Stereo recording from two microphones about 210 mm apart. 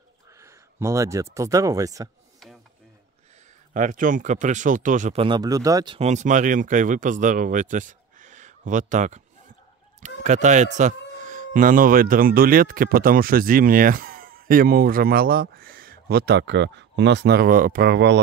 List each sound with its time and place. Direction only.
0.4 s speech: 15° right (ahead or behind)
3.7 s speech: 40° right (ahead or behind); by 5.9 s 15° right (ahead or behind)
5.9 s speech: 35° right (ahead or behind); by 18.2 s 55° right (ahead or behind)